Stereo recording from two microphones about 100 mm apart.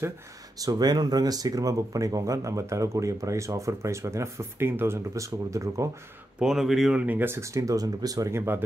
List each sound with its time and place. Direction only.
0.6 s speech: 40° right (ahead or behind)
6.4 s speech: 5° right (ahead or behind)
7.0 s speech: 20° right (ahead or behind)